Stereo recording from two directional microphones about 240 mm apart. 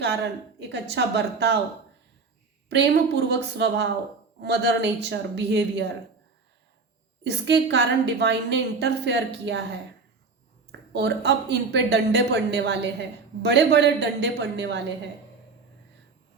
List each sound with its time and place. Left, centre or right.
0.7 s a woman's voice: right
2.6 s a woman's voice: right
7.3 s a woman's voice: right
10.7 s a woman's voice: right